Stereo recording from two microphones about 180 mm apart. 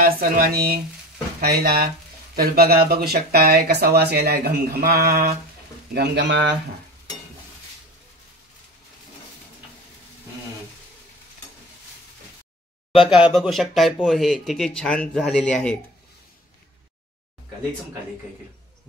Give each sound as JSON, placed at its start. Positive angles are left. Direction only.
{"t": 0.0, "sound": "speech", "side_deg": -50}
{"t": 5.9, "sound": "speech", "side_deg": -75}
{"t": 12.9, "sound": "speech", "side_deg": 0}